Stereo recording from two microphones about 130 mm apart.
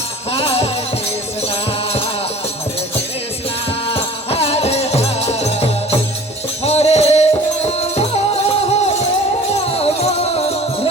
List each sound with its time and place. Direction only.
0.3 s music: 50° left (ahead or behind)
3.8 s music: 50° left (ahead or behind)